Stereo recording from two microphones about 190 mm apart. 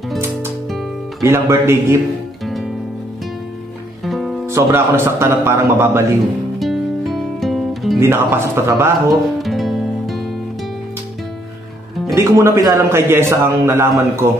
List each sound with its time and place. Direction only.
1.2 s a man's voice: 15° right (ahead or behind)
2.4 s music: centre (ahead or behind)
4.0 s music: centre (ahead or behind)
4.5 s a man's voice: 15° right (ahead or behind)
6.6 s music: centre (ahead or behind)
8.0 s a man's voice: 15° right (ahead or behind)
9.1 s music: centre (ahead or behind)
12.1 s a man's voice: 15° right (ahead or behind)